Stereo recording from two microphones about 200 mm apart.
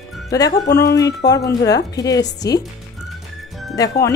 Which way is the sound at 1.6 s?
20° left (ahead or behind).